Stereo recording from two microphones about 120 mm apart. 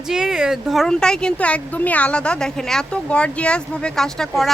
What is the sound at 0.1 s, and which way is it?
Speech, 5° right (ahead or behind).